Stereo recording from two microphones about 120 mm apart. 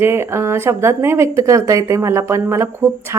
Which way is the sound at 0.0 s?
20° right (ahead or behind).